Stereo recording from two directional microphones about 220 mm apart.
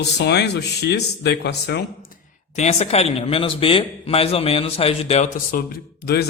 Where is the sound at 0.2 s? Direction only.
50° left (ahead or behind).